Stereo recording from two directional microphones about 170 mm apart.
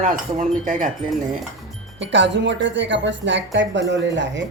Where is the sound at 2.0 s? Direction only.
90° right.